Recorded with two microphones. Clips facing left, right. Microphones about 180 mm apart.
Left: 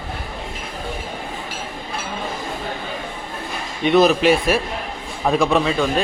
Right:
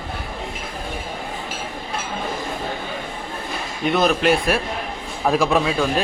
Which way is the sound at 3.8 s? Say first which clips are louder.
Left 4 dB; centre (ahead or behind).